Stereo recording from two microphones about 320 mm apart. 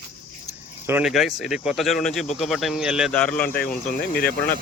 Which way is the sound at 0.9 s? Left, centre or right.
Centre.